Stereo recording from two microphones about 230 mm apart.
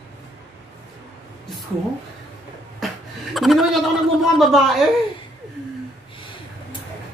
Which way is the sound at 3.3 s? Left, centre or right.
Centre.